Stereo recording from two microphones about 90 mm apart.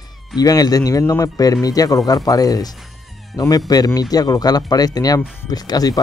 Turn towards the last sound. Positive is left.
turn(degrees=45)  # may be behind; listen again after turning